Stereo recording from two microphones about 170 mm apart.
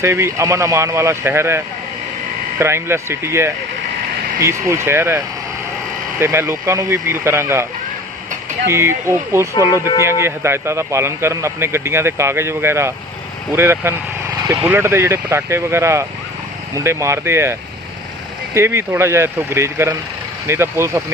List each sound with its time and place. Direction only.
0.0 s a man's voice: 15° right (ahead or behind)
2.6 s a man's voice: 15° right (ahead or behind)
8.6 s a man's voice: 15° right (ahead or behind)